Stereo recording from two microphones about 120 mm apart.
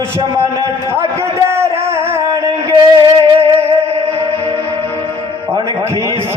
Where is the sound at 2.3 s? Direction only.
35° right (ahead or behind).